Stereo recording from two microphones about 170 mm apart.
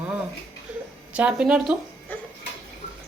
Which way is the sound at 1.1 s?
5° right (ahead or behind).